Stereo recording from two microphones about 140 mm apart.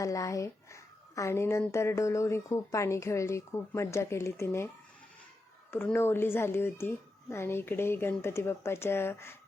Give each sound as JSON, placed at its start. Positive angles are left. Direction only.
{"t": 0.0, "sound": "a woman's voice", "side_deg": 25}
{"t": 5.7, "sound": "a woman's voice", "side_deg": 15}